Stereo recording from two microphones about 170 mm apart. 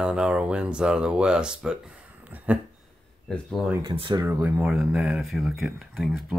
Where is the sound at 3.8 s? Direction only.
25° right (ahead or behind).